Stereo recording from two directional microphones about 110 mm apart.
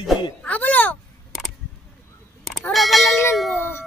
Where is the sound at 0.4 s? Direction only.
15° left (ahead or behind).